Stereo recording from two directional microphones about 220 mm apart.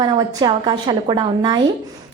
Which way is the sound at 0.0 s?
20° right (ahead or behind).